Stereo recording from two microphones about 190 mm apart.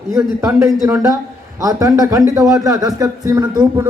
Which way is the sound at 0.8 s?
15° right (ahead or behind).